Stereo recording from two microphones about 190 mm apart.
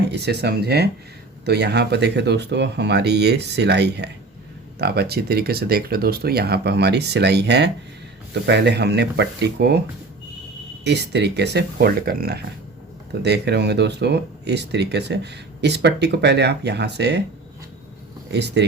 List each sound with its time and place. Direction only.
0.1 s speech: 60° right (ahead or behind)
10.8 s speech: 60° right (ahead or behind)
18.3 s speech: 60° right (ahead or behind)